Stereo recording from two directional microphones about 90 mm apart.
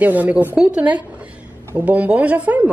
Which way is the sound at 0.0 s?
20° right (ahead or behind).